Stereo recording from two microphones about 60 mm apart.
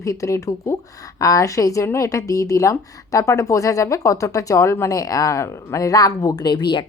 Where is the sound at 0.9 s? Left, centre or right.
Left.